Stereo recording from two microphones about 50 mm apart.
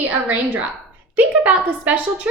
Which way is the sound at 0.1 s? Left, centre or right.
Right.